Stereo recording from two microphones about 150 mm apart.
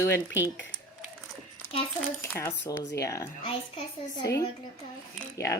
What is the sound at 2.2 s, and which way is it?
A woman's voice, 15° left (ahead or behind).